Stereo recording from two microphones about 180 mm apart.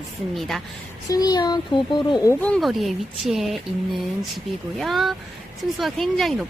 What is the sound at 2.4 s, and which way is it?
A woman's voice, 5° left (ahead or behind).